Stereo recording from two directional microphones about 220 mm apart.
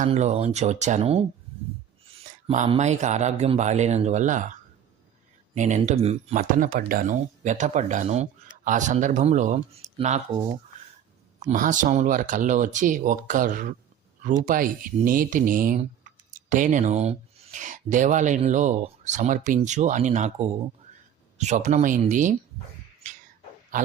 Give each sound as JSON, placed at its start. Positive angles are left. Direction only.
{"t": 0.0, "sound": "speech", "side_deg": -30}
{"t": 2.5, "sound": "speech", "side_deg": -30}
{"t": 5.5, "sound": "speech", "side_deg": -30}
{"t": 11.4, "sound": "speech", "side_deg": -35}
{"t": 23.7, "sound": "a sound", "side_deg": -35}